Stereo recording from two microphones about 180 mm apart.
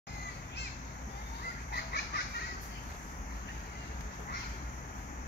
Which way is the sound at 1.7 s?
65° left (ahead or behind).